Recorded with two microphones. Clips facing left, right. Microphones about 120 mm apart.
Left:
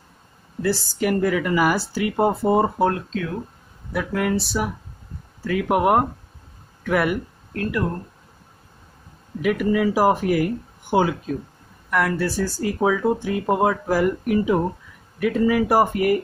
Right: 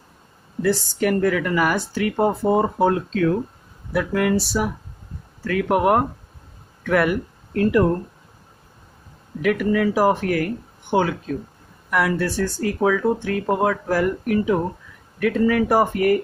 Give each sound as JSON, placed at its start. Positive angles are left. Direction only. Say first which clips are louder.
{"t": 0.6, "sound": "speech", "louder": "right 2 dB", "side_deg": 5}
{"t": 3.9, "sound": "speech", "louder": "right 3 dB", "side_deg": 0}
{"t": 7.5, "sound": "speech", "louder": "right 7 dB", "side_deg": -30}
{"t": 9.4, "sound": "speech", "louder": "right 1 dB", "side_deg": 10}
{"t": 11.9, "sound": "speech", "louder": "right 1 dB", "side_deg": -5}